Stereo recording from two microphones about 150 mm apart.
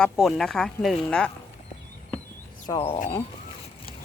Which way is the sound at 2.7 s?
30° left (ahead or behind).